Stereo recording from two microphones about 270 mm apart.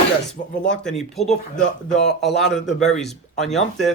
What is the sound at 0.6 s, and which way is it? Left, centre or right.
Speech, left.